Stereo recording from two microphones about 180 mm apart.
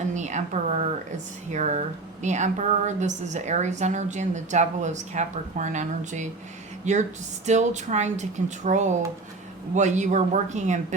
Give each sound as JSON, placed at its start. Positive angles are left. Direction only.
{"t": 0.1, "sound": "a woman's voice", "side_deg": -40}